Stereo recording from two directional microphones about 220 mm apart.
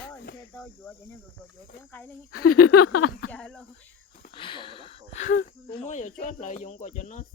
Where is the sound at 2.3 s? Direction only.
90° left.